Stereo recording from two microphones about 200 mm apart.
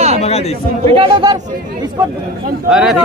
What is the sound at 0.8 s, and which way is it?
Speech, 25° right (ahead or behind).